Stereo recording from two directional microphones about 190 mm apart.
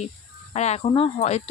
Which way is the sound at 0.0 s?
35° left (ahead or behind).